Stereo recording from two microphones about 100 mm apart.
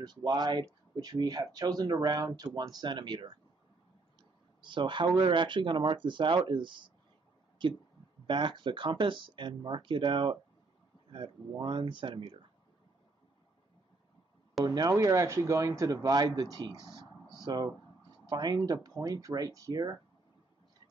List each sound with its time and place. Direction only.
0.0 s speech: 45° right (ahead or behind)
14.6 s speech: 40° right (ahead or behind)
15.0 s speech: 30° right (ahead or behind)
17.3 s a sound: 45° right (ahead or behind)
18.3 s speech: 45° right (ahead or behind)